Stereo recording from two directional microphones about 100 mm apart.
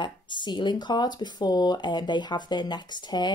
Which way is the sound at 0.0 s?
50° left (ahead or behind).